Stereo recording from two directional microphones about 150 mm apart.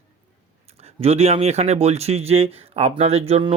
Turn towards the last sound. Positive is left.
turn(degrees=-40)  # may be behind; listen again after turning